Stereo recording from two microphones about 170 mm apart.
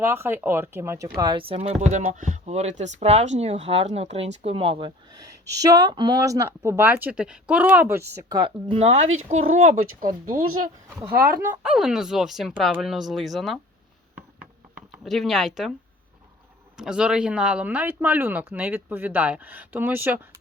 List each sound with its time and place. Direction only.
0.0 s speech: 15° right (ahead or behind)
1.1 s speech: 25° right (ahead or behind)
5.5 s speech: 20° right (ahead or behind)
8.4 s speech: 30° right (ahead or behind); by 10.2 s 50° right (ahead or behind)
11.1 s speech: 60° right (ahead or behind)
11.6 s speech: 5° right (ahead or behind)
14.8 s speech: 5° right (ahead or behind)
16.7 s speech: 5° right (ahead or behind)